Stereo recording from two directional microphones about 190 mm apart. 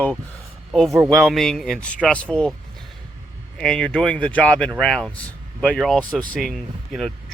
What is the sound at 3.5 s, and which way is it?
Speech, 5° left (ahead or behind).